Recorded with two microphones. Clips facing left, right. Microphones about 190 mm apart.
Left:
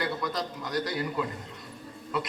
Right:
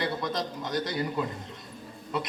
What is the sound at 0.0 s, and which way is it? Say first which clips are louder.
A man's voice: right 1 dB; 25° right (ahead or behind).